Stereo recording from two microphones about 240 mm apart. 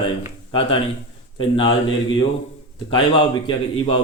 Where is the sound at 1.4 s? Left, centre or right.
Left.